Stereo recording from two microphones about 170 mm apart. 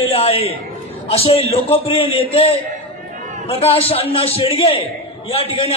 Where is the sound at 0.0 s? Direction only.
35° left (ahead or behind).